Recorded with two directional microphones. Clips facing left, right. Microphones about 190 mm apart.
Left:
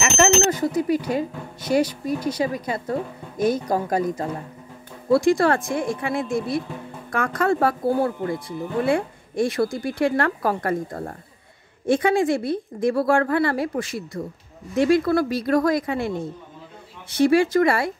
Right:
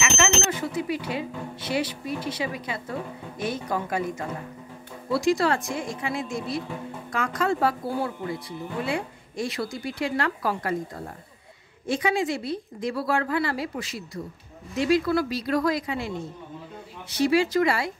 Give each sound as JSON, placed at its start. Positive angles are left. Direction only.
{"t": 0.0, "sound": "speech", "side_deg": 40}
{"t": 5.1, "sound": "speech", "side_deg": 50}
{"t": 17.1, "sound": "speech", "side_deg": 55}